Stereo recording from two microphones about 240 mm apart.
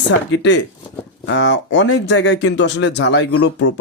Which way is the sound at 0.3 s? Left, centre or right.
Left.